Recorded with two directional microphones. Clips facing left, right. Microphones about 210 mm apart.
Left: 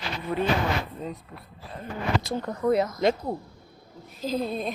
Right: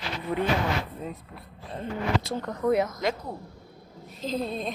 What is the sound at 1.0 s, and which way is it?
Speech, 5° right (ahead or behind).